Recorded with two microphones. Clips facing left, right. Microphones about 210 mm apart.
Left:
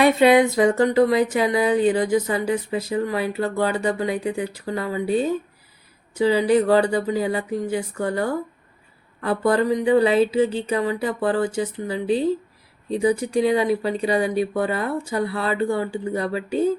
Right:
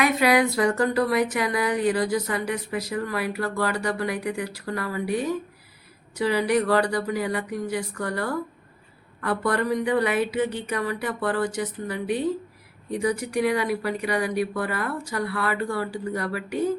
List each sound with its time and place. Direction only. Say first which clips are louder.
0.0 s speech: left 6 dB; 25° left (ahead or behind)